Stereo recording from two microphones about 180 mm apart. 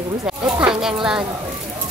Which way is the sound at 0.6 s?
5° right (ahead or behind).